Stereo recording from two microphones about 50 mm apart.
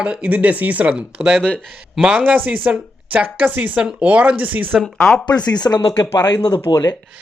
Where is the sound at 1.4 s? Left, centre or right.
Centre.